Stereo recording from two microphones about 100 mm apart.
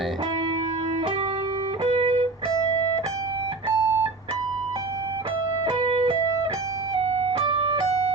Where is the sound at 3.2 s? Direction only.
45° right (ahead or behind).